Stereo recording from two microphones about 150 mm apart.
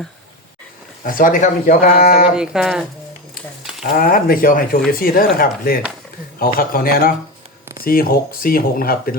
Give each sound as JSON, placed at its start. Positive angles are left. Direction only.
{"t": 1.0, "sound": "speech", "side_deg": 65}
{"t": 2.3, "sound": "speech", "side_deg": -5}
{"t": 3.6, "sound": "a sound", "side_deg": -5}
{"t": 3.8, "sound": "speech", "side_deg": 85}